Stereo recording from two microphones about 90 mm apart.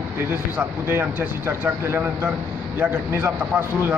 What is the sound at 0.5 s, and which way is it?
A man's voice, 25° right (ahead or behind).